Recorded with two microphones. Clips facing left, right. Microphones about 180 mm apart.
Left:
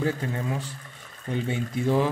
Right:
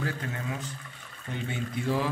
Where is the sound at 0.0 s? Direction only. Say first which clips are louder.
Left 6 dB; 30° left (ahead or behind).